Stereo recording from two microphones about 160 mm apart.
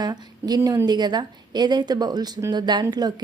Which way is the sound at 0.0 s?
25° right (ahead or behind).